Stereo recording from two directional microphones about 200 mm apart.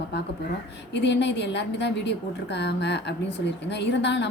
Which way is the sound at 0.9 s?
60° left (ahead or behind).